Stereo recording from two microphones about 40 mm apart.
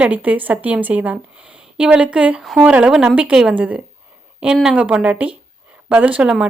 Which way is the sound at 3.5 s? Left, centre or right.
Right.